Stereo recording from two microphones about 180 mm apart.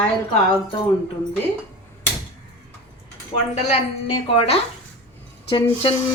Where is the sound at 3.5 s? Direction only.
35° left (ahead or behind).